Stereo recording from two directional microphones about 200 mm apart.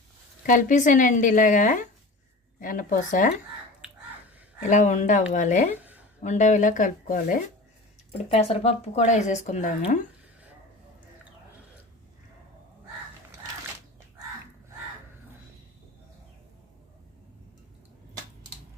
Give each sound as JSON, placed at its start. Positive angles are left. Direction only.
{"t": 0.4, "sound": "a woman's voice", "side_deg": 40}
{"t": 4.6, "sound": "speech", "side_deg": 40}
{"t": 5.7, "sound": "a sound", "side_deg": -10}
{"t": 6.2, "sound": "speech", "side_deg": 35}